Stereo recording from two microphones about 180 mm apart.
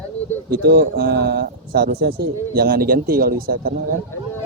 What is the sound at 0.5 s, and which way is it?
A man's voice, 60° right (ahead or behind).